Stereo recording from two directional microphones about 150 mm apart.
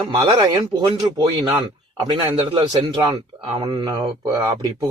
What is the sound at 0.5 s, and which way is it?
Speech, 30° right (ahead or behind).